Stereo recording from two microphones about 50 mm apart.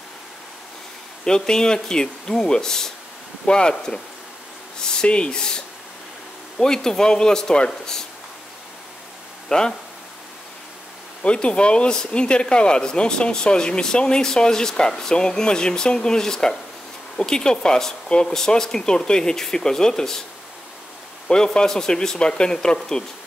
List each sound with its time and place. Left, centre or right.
1.2 s speech: centre
6.6 s speech: centre
9.5 s speech: centre
11.2 s speech: left
21.3 s speech: centre